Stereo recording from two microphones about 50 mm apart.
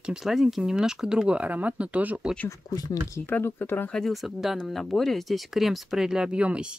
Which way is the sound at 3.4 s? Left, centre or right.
Left.